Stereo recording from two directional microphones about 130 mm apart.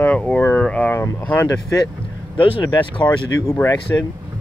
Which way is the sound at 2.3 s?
35° left (ahead or behind).